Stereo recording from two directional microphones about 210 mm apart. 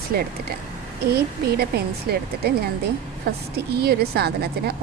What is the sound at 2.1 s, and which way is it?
Speech, 45° right (ahead or behind).